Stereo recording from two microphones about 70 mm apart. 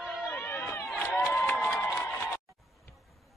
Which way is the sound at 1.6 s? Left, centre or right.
Centre.